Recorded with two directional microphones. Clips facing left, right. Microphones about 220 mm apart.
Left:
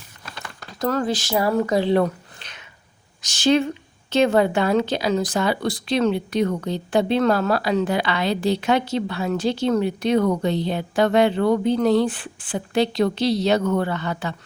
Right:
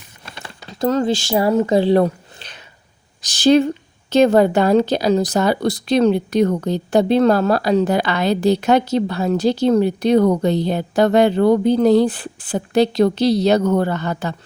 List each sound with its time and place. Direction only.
0.3 s crumpling: 25° right (ahead or behind)
1.6 s speech: 30° right (ahead or behind)